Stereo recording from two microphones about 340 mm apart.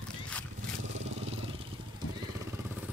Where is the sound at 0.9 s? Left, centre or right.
Centre.